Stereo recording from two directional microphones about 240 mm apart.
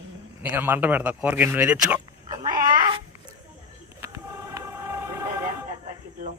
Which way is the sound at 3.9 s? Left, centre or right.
Centre.